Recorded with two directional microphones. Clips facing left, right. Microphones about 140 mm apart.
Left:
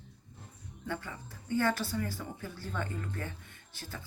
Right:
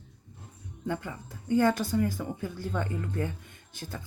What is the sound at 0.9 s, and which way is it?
Speech, 20° right (ahead or behind).